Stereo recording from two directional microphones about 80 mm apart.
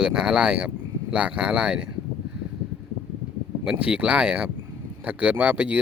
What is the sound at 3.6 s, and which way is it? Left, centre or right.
Speech, centre.